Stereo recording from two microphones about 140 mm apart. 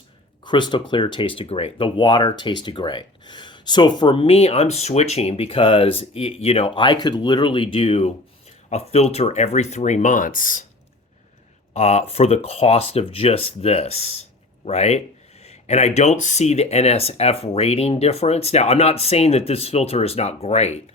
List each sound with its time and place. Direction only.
0.4 s speech: 35° left (ahead or behind); by 10.6 s 75° left (ahead or behind)
11.7 s speech: 50° left (ahead or behind)